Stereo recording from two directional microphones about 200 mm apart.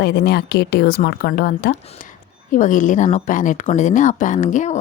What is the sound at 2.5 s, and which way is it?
Speech, 40° left (ahead or behind).